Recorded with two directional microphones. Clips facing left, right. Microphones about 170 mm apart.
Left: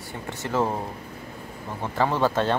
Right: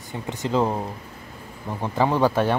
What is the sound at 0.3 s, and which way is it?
Speech, 15° right (ahead or behind).